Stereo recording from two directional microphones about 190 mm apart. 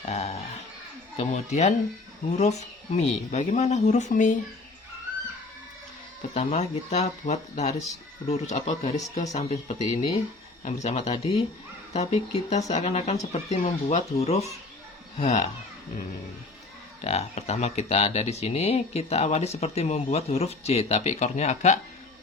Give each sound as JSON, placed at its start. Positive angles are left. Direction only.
{"t": 0.0, "sound": "a sound", "side_deg": 35}
{"t": 1.1, "sound": "speech", "side_deg": 35}
{"t": 6.3, "sound": "speech", "side_deg": 35}
{"t": 17.0, "sound": "speech", "side_deg": 35}